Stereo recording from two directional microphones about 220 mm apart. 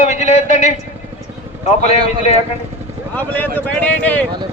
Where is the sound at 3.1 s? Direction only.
10° left (ahead or behind).